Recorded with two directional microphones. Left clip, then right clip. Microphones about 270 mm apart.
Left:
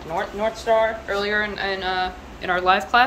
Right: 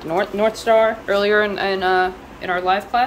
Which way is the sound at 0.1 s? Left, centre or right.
Right.